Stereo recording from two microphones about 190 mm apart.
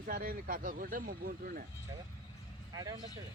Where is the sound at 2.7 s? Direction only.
20° right (ahead or behind).